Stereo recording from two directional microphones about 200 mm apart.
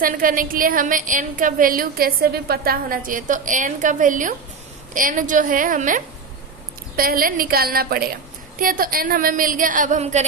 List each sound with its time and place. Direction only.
0.0 s a woman's voice: 45° right (ahead or behind)